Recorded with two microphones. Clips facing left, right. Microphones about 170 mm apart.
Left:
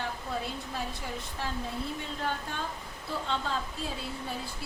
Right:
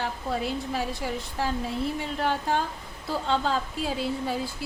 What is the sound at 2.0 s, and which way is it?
A woman's voice, 85° right.